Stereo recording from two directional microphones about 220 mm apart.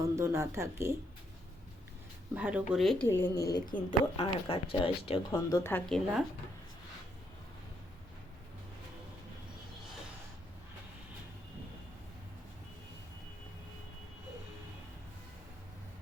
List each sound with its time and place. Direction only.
0.0 s speech: 15° right (ahead or behind)
2.3 s speech: 5° right (ahead or behind)
3.2 s a woman's voice: 15° left (ahead or behind)